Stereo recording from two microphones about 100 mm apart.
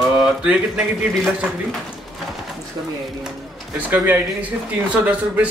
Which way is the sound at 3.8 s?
15° right (ahead or behind).